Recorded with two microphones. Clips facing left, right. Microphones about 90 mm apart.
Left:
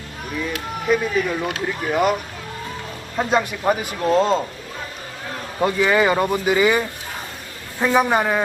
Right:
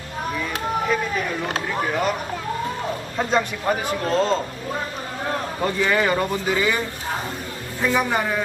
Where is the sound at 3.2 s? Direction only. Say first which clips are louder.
Left 3 dB; 10° left (ahead or behind).